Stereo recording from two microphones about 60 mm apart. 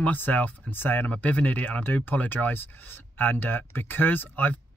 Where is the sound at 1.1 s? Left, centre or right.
Left.